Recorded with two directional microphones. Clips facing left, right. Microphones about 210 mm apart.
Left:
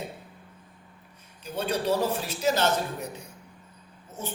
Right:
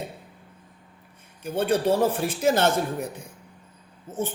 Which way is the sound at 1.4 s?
55° right (ahead or behind).